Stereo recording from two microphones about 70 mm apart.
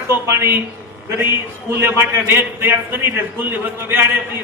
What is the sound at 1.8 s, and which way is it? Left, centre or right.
A man's voice, right.